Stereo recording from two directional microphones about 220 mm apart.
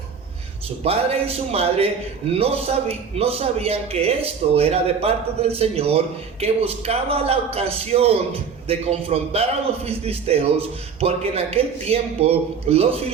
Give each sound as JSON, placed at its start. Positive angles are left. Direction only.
{"t": 0.9, "sound": "a man's voice", "side_deg": -25}